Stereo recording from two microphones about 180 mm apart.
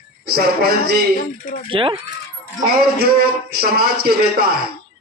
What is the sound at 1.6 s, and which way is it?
Speech, 30° right (ahead or behind).